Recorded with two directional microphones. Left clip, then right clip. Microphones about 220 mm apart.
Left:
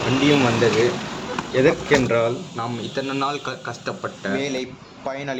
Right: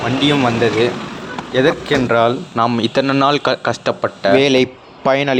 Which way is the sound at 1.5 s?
25° right (ahead or behind).